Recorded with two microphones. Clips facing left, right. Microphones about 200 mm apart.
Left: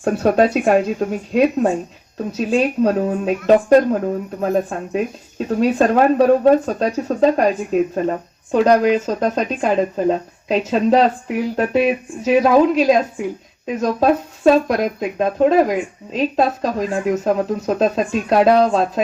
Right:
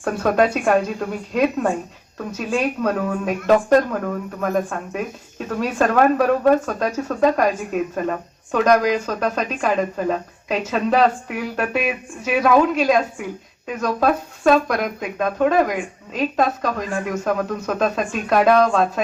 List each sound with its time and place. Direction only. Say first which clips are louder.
0.0 s speech: left 3 dB; 30° left (ahead or behind)